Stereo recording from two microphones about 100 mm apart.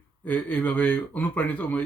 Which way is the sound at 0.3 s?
15° left (ahead or behind).